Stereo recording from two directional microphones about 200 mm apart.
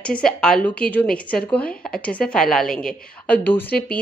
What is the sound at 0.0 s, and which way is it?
A woman's voice, 5° left (ahead or behind).